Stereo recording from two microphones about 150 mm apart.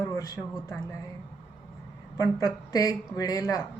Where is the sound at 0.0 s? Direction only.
20° left (ahead or behind).